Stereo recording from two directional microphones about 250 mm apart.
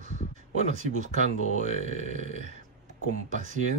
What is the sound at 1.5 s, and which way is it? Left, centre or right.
Speech, right.